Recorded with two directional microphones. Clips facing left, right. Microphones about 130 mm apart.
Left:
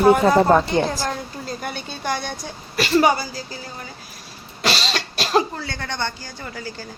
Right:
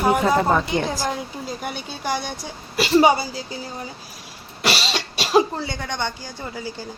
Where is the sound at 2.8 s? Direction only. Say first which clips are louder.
Right 1 dB; 25° right (ahead or behind).